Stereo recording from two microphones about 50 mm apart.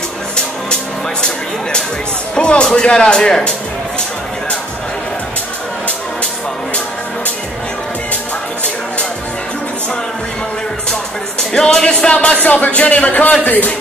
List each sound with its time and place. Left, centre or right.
2.3 s speech: centre
11.5 s speech: centre
12.4 s speech: left